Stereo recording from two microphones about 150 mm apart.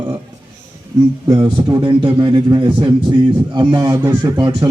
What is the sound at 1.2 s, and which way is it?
A man's voice, 30° right (ahead or behind).